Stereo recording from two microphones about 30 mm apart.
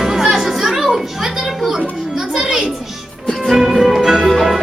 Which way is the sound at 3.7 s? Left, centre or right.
Centre.